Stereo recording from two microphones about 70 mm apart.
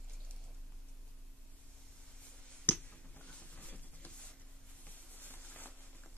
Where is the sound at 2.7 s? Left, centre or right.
Left.